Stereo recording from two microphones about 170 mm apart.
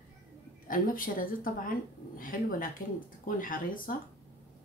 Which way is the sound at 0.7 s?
55° left (ahead or behind).